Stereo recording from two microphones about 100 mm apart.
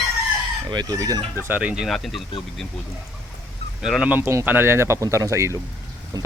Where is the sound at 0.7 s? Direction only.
40° right (ahead or behind).